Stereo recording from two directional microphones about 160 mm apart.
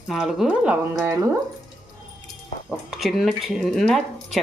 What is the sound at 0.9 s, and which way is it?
Speech, 20° right (ahead or behind).